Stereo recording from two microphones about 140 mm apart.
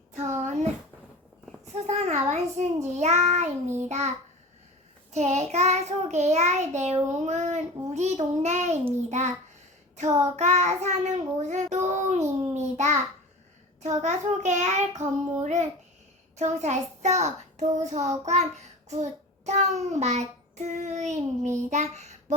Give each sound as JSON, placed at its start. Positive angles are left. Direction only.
{"t": 0.1, "sound": "a sound", "side_deg": -55}
{"t": 1.6, "sound": "a sound", "side_deg": -55}
{"t": 2.8, "sound": "a child's voice", "side_deg": -55}
{"t": 3.8, "sound": "child singing", "side_deg": -55}
{"t": 5.1, "sound": "child singing", "side_deg": -55}
{"t": 9.0, "sound": "a child's voice", "side_deg": -55}